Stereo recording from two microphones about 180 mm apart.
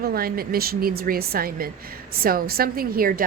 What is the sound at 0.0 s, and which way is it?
A woman's voice, 55° right (ahead or behind).